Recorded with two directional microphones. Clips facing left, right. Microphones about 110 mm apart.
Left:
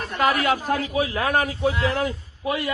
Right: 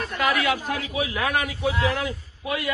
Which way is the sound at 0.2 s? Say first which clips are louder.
Left 3 dB; 40° left (ahead or behind).